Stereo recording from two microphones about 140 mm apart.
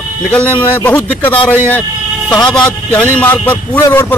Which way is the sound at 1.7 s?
15° left (ahead or behind).